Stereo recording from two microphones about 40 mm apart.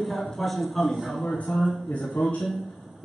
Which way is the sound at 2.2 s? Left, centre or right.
Left.